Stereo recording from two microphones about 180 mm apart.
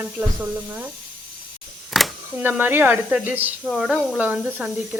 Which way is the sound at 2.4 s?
10° right (ahead or behind).